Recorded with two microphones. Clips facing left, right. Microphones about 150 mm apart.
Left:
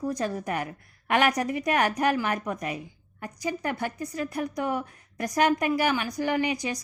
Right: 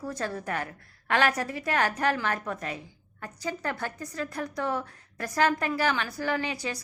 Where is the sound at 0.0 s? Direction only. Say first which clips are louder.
Left 4 dB; 15° left (ahead or behind).